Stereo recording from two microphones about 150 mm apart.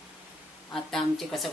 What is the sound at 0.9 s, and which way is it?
Speech, centre (ahead or behind).